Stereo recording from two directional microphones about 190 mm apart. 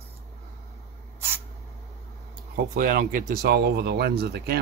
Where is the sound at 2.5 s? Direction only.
45° right (ahead or behind).